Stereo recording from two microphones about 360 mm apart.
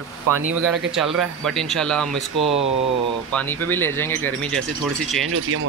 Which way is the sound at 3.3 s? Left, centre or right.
Centre.